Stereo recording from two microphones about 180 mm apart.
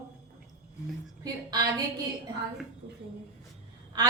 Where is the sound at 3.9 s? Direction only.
20° right (ahead or behind).